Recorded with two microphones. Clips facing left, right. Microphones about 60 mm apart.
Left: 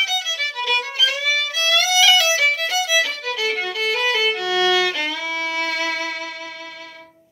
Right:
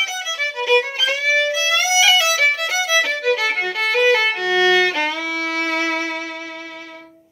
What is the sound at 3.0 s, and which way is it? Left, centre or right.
Violin, right.